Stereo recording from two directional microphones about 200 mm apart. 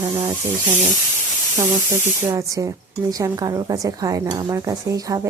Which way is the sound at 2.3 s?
15° right (ahead or behind).